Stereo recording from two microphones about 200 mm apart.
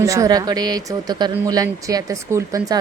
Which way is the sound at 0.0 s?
15° right (ahead or behind).